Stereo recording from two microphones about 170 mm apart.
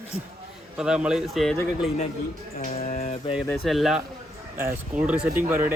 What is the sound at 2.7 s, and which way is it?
Mantra, 40° left (ahead or behind).